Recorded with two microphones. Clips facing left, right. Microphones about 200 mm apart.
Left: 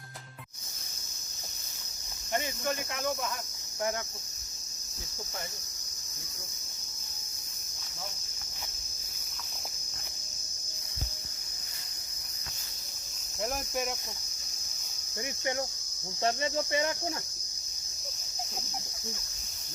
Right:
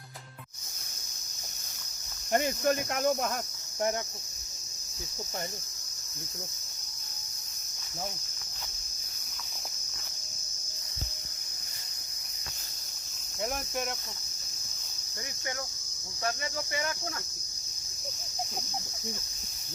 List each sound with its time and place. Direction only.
2.3 s cricket: 50° right (ahead or behind)
13.4 s insect: 5° left (ahead or behind)
16.2 s cricket: 25° left (ahead or behind)